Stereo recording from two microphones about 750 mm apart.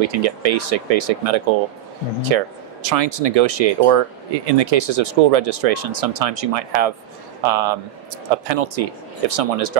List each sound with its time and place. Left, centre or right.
0.0 s speech: right